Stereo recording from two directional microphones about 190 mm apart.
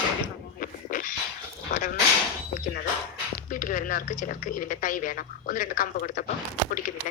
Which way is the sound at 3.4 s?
45° left (ahead or behind).